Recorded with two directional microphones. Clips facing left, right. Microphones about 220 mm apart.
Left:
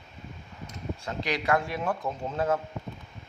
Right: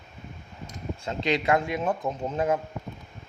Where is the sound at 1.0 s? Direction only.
25° right (ahead or behind).